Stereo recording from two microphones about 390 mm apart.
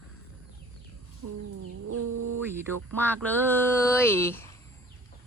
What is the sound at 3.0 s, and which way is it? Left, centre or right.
Speech, centre.